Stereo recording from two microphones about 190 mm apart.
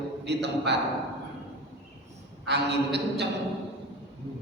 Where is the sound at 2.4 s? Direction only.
65° right (ahead or behind).